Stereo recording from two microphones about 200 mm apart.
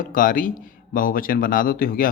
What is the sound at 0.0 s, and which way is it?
Speech, 45° left (ahead or behind).